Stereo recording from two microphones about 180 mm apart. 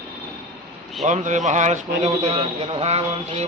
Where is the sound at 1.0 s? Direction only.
40° right (ahead or behind).